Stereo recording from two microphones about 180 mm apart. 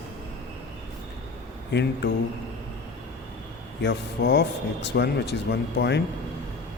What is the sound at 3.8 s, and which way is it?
Speech, 70° left (ahead or behind).